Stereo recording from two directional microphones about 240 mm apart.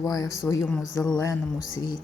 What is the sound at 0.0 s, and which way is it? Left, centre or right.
Speech, centre.